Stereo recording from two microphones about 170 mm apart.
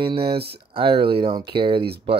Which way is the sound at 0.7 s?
30° right (ahead or behind).